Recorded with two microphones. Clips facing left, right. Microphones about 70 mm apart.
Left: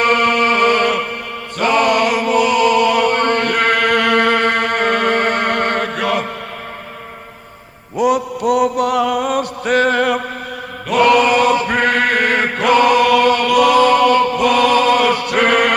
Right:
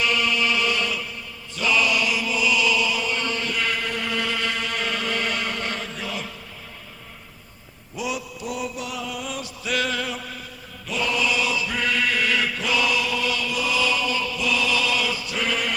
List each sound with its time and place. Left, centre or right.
0.0 s music: left
1.5 s chant: left
7.9 s mantra: left
10.8 s chant: left